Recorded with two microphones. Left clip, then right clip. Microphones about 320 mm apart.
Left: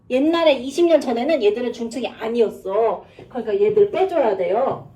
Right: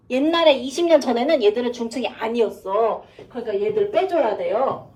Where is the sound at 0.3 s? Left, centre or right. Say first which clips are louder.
Right 2 dB; centre.